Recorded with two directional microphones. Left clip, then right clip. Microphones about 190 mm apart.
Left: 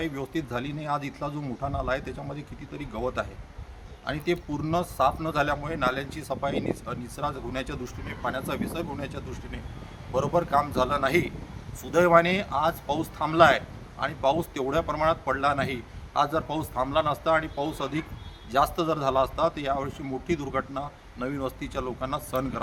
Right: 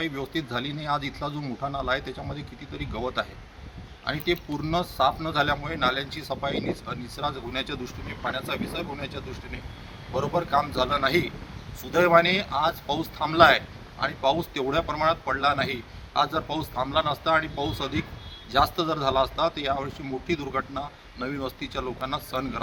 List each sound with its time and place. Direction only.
0.0 s a man's voice: 10° left (ahead or behind)